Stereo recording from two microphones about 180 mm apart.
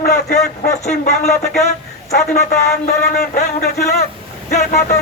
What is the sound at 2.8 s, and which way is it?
Speech, 45° left (ahead or behind).